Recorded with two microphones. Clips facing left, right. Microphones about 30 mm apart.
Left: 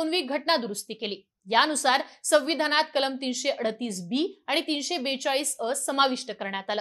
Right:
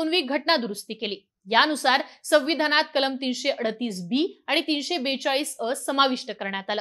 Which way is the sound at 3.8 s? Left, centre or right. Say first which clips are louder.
Right 3 dB; right.